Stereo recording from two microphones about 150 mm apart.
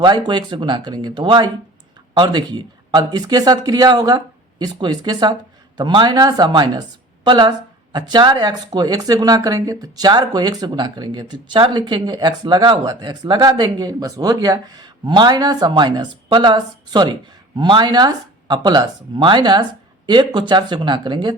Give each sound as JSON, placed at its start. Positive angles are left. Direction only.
{"t": 0.0, "sound": "speech", "side_deg": -30}